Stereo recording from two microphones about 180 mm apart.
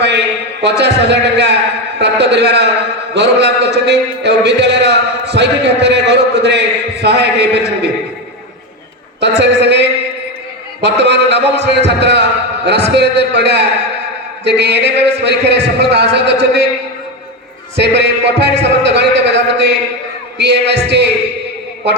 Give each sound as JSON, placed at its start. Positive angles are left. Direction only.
{"t": 0.0, "sound": "a man's voice", "side_deg": -70}
{"t": 9.2, "sound": "a man's voice", "side_deg": -70}
{"t": 17.7, "sound": "a man's voice", "side_deg": -70}